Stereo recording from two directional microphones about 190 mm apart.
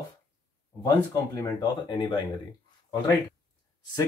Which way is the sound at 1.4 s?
25° left (ahead or behind).